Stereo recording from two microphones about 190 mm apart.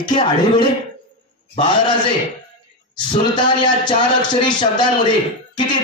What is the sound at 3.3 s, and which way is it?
A man's voice, 25° left (ahead or behind).